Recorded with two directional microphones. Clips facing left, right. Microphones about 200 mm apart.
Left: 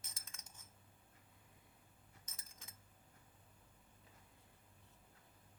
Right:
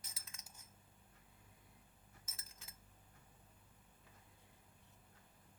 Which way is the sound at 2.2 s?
5° right (ahead or behind).